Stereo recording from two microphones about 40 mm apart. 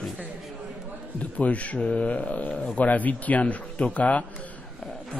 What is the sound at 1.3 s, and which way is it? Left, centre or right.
Speech, left.